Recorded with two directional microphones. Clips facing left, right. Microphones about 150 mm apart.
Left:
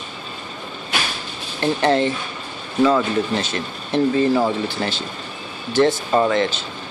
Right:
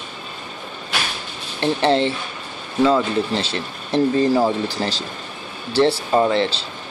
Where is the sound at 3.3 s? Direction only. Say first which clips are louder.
Even; 30° right (ahead or behind).